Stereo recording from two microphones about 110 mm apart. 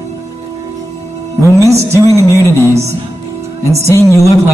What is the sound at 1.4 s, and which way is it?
Music, 25° right (ahead or behind).